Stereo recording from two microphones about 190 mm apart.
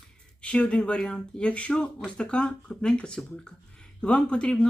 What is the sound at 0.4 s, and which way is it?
Speech, 5° left (ahead or behind).